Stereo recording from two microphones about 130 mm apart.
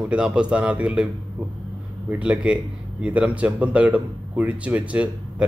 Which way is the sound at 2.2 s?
10° right (ahead or behind).